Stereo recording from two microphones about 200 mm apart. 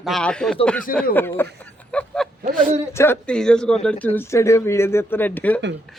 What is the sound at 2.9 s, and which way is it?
A woman's voice, 10° left (ahead or behind).